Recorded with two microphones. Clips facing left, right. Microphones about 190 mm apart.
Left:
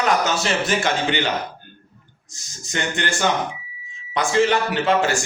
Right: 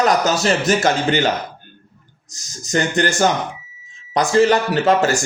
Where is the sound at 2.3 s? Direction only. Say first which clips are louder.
Right 9 dB; 40° right (ahead or behind).